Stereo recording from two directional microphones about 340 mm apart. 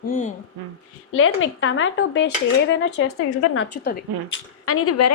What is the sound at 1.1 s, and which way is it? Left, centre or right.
A woman's voice, left.